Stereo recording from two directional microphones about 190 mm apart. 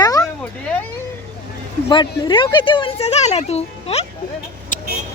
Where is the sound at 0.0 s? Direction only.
20° left (ahead or behind).